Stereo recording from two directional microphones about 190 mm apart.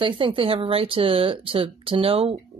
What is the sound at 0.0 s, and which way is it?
Speech, 25° right (ahead or behind).